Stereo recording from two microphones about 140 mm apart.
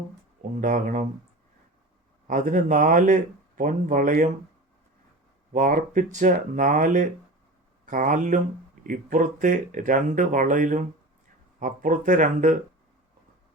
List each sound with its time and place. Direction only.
0.6 s speech: 65° right (ahead or behind)
2.2 s speech: 70° right (ahead or behind)
5.5 s speech: 70° right (ahead or behind)